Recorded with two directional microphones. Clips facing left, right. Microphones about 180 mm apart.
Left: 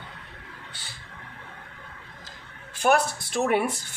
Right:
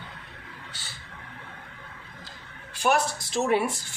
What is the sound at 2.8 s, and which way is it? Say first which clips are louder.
Speech: left 2 dB; 55° left (ahead or behind).